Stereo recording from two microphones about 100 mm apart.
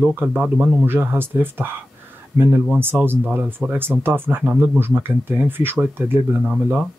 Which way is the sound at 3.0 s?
20° right (ahead or behind).